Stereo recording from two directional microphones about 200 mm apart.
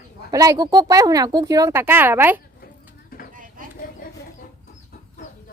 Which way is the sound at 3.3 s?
40° right (ahead or behind).